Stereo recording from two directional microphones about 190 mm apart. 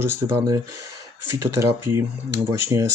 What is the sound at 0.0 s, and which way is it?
Speech, 15° right (ahead or behind).